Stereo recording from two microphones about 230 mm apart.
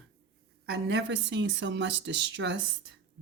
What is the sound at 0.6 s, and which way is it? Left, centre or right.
Speech, right.